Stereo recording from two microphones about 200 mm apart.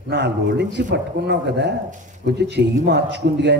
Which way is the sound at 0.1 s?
60° right (ahead or behind).